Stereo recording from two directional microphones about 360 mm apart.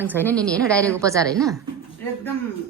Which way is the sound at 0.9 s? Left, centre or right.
Centre.